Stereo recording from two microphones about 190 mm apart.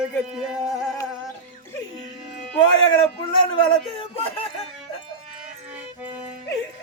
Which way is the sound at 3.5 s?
30° left (ahead or behind).